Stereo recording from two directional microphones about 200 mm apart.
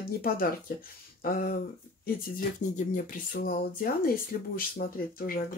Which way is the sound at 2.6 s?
40° left (ahead or behind).